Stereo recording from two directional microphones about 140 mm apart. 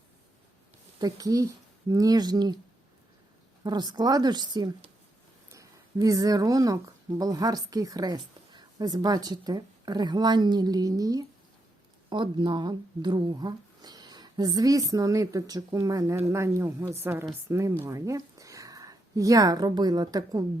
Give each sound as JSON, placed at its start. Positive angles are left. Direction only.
{"t": 0.9, "sound": "speech", "side_deg": -25}
{"t": 3.6, "sound": "speech", "side_deg": -30}